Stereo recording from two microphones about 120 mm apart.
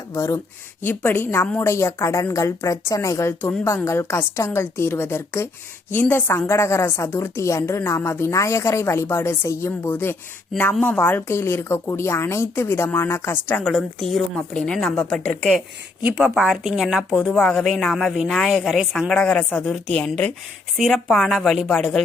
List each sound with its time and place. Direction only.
0.1 s a woman's voice: 25° left (ahead or behind); by 15.2 s 5° left (ahead or behind)
16.0 s a woman's voice: 5° right (ahead or behind)